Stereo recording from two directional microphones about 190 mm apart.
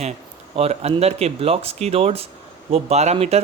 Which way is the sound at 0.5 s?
35° right (ahead or behind).